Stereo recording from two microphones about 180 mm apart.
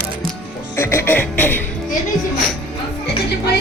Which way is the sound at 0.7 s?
15° left (ahead or behind).